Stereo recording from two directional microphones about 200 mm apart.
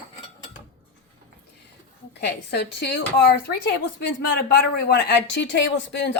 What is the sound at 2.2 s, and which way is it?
Speech, 55° left (ahead or behind).